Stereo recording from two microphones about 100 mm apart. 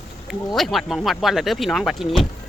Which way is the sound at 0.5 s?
Centre (ahead or behind).